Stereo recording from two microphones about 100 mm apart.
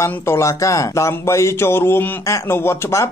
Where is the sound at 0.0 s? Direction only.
30° left (ahead or behind).